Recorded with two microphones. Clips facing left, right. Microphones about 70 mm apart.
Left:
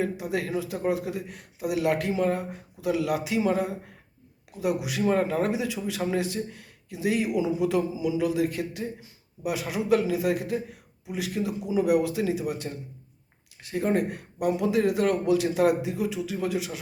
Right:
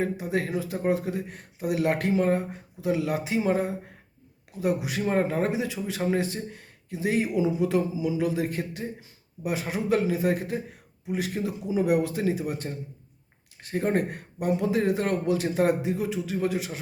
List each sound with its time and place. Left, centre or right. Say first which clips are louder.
0.0 s a man's voice: right 1 dB; right